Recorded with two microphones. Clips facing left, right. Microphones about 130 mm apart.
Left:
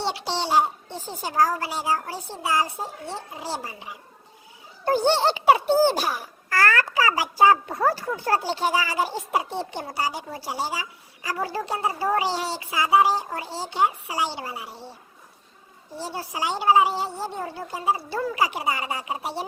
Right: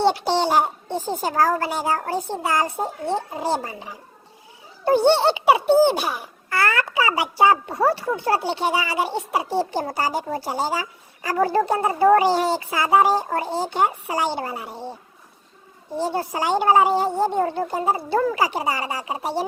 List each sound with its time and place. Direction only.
0.0 s a child's voice: 50° right (ahead or behind)
5.3 s a child's voice: 20° right (ahead or behind)
9.6 s speech: 40° right (ahead or behind)
16.0 s speech: 55° right (ahead or behind)
18.5 s a child's voice: 30° right (ahead or behind)